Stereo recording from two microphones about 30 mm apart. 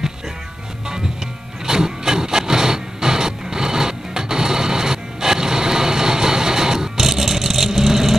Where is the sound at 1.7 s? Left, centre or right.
Centre.